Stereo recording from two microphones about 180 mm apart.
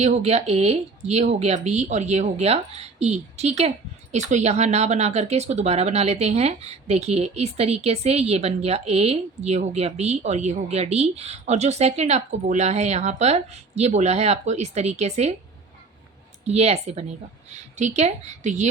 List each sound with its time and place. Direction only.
0.0 s speech: 40° right (ahead or behind)
16.4 s speech: 35° right (ahead or behind)